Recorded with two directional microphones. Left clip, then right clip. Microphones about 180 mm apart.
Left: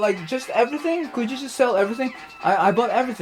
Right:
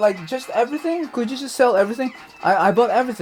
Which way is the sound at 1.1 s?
30° right (ahead or behind).